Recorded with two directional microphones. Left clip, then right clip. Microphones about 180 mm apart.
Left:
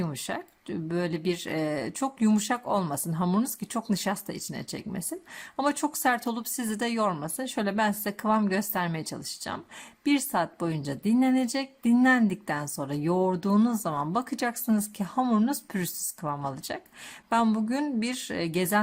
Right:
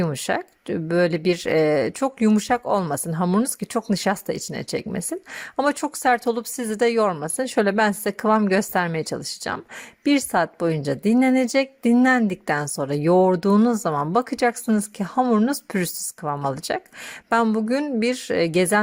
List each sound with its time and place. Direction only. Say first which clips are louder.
0.0 s speech: right 10 dB; 35° right (ahead or behind)